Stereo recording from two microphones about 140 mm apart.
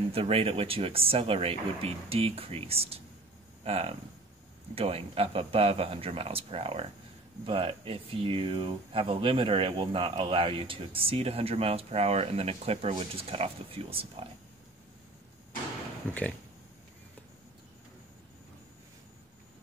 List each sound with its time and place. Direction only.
0.1 s speech: 45° right (ahead or behind)
16.1 s speech: 10° left (ahead or behind)